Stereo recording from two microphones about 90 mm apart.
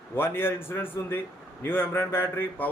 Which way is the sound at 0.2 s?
25° left (ahead or behind).